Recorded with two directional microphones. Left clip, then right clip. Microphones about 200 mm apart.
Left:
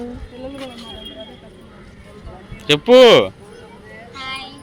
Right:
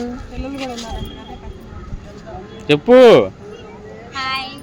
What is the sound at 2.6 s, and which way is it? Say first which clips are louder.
Speech: right 1 dB; centre (ahead or behind).